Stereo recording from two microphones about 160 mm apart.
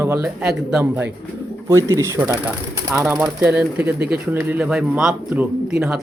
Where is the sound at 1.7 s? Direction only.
20° right (ahead or behind).